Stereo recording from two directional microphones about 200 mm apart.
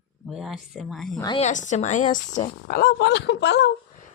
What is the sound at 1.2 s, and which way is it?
Speech, 20° left (ahead or behind).